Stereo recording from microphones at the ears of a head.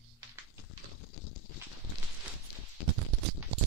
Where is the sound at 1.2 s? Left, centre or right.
Left.